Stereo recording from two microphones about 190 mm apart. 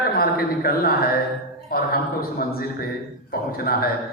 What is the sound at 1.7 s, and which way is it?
A man's voice, 50° left (ahead or behind).